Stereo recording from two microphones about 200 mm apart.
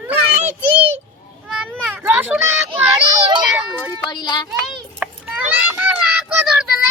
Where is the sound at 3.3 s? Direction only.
5° right (ahead or behind).